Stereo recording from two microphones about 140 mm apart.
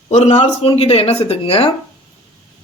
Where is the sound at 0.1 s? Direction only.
50° left (ahead or behind).